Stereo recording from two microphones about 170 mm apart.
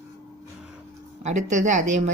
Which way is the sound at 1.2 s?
45° right (ahead or behind).